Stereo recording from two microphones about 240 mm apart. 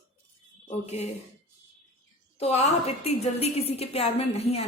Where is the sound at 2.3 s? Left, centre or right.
Left.